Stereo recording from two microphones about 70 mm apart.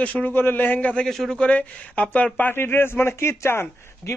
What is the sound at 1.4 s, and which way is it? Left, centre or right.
Speech, centre.